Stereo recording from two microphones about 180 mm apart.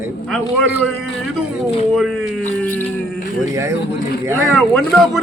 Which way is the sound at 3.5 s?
15° right (ahead or behind).